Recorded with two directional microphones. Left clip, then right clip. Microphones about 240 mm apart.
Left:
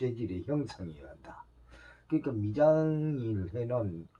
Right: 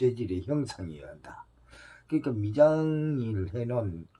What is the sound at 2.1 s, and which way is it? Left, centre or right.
Speech, right.